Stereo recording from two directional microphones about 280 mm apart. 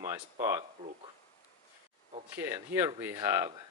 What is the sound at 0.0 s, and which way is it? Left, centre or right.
Speech, centre.